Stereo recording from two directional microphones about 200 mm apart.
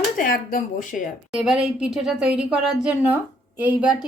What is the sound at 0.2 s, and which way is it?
Speech, 45° left (ahead or behind).